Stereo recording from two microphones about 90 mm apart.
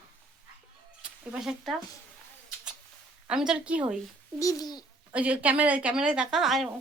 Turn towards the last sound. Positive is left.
turn(degrees=-5)  # may be behind; listen again after turning